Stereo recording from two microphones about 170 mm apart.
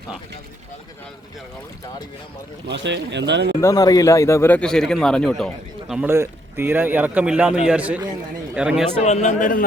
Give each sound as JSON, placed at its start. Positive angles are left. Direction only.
{"t": 2.6, "sound": "speech", "side_deg": -90}
{"t": 3.6, "sound": "a man's voice", "side_deg": 20}
{"t": 5.9, "sound": "speech", "side_deg": -10}
{"t": 9.0, "sound": "speech", "side_deg": 40}